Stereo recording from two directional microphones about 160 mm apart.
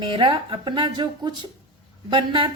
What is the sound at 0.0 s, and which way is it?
A woman's voice, 30° right (ahead or behind).